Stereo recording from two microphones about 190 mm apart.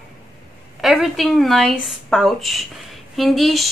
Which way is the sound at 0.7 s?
Centre (ahead or behind).